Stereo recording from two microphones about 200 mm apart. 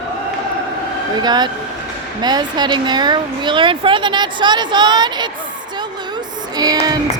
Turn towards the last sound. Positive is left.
turn(degrees=-20)  # may be behind; listen again after turning